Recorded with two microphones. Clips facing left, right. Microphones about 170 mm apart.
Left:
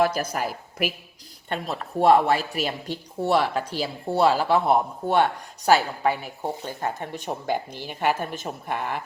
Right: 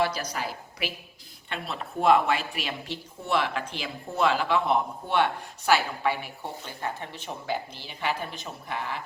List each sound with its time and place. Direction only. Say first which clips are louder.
0.0 s a woman's voice: left 5 dB; 50° left (ahead or behind)